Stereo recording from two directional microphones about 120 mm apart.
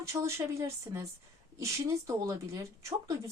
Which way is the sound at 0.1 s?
25° right (ahead or behind).